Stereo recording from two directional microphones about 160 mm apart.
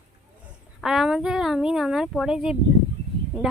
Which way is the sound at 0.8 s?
5° right (ahead or behind).